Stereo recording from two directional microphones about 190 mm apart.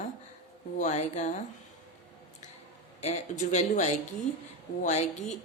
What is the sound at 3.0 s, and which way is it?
A woman's voice, 35° left (ahead or behind).